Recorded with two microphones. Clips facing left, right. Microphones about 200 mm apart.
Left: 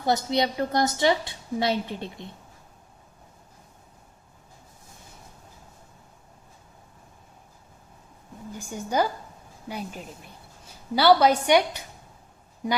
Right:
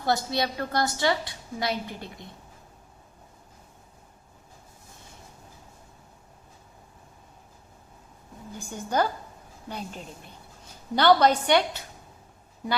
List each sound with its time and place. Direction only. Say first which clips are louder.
0.0 s a woman's voice: left 3 dB; 20° left (ahead or behind)
8.5 s a woman's voice: left 1 dB; 10° left (ahead or behind)